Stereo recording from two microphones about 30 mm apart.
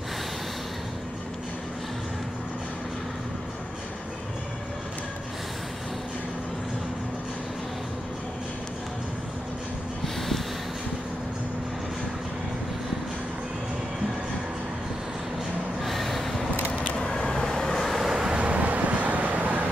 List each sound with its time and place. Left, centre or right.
10.0 s snort: centre
15.8 s a sound: centre
16.9 s vehicle: centre
17.8 s vehicle: centre
18.4 s vehicle: right